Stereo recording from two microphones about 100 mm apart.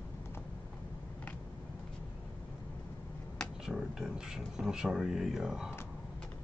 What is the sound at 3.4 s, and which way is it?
Speech, 5° right (ahead or behind).